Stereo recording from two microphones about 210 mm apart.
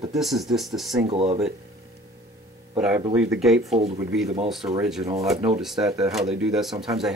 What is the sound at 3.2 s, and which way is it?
Speech, 5° right (ahead or behind).